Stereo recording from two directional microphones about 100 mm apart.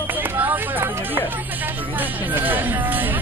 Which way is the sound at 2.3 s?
20° right (ahead or behind).